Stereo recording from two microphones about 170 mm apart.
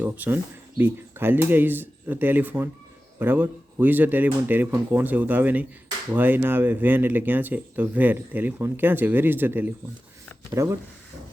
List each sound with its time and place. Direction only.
0.0 s speech: 10° right (ahead or behind)